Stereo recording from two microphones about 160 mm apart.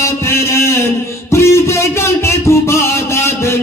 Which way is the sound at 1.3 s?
15° left (ahead or behind).